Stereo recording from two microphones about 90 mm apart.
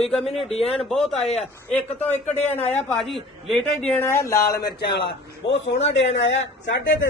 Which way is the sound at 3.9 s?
20° left (ahead or behind).